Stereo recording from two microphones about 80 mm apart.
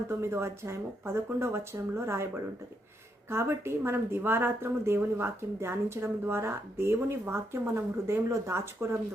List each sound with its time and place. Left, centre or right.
0.1 s speech: right